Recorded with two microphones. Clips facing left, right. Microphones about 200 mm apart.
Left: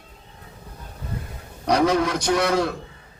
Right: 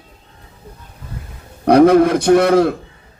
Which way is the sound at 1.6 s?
55° right (ahead or behind).